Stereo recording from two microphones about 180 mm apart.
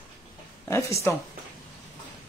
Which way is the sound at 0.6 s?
15° left (ahead or behind).